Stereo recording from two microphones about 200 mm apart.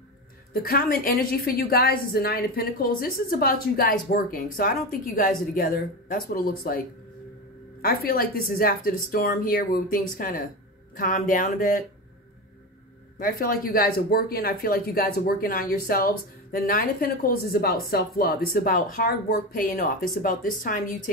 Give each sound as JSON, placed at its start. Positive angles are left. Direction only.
{"t": 0.5, "sound": "speech", "side_deg": 50}
{"t": 7.8, "sound": "speech", "side_deg": 45}
{"t": 13.2, "sound": "speech", "side_deg": 45}